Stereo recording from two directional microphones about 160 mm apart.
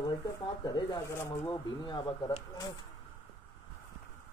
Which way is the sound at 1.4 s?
30° left (ahead or behind).